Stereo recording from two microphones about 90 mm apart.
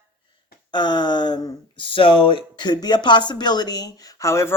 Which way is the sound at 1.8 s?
75° left (ahead or behind).